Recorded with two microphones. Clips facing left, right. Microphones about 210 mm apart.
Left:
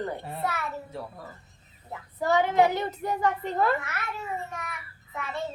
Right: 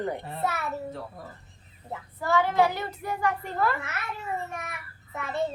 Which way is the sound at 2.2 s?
20° left (ahead or behind).